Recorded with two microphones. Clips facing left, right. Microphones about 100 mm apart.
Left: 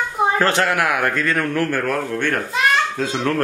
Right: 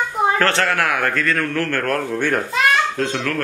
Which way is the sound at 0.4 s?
15° left (ahead or behind).